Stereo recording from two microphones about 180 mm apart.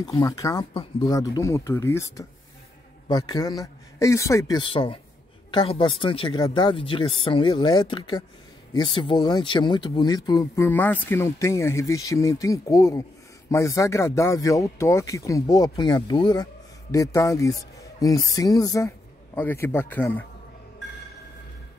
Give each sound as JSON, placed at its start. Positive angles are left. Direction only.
{"t": 0.0, "sound": "speech", "side_deg": 20}